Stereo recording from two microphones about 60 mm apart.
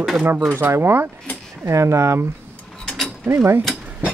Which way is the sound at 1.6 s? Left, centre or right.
Right.